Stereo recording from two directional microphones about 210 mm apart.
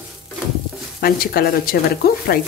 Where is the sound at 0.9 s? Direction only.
45° left (ahead or behind).